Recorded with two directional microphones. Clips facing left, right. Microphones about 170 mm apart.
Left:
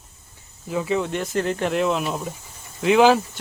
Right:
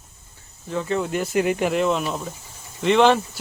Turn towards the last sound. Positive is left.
turn(degrees=5)  # may be behind; listen again after turning